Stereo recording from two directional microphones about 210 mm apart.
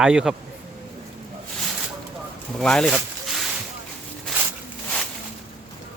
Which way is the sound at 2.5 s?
Centre (ahead or behind).